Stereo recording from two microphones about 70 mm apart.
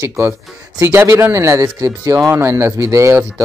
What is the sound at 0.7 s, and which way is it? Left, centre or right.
Speech, right.